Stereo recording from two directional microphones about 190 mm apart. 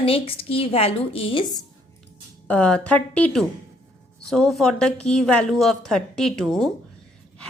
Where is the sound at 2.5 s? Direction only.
5° left (ahead or behind).